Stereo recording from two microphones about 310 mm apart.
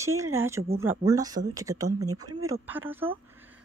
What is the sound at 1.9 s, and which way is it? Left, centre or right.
Speech, right.